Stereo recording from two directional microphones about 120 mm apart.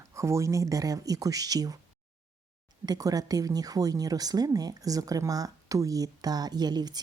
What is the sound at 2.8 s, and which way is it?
Speech, 30° right (ahead or behind).